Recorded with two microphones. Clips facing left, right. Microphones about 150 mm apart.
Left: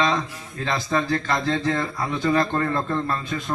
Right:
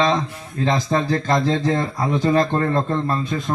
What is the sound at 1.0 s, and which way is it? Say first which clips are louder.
Speech: right 3 dB; 35° right (ahead or behind).